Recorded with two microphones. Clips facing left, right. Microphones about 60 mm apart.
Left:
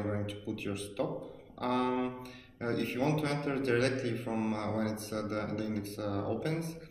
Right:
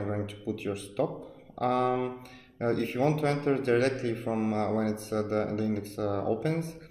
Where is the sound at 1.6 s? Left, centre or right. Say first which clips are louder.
Right 5 dB; right.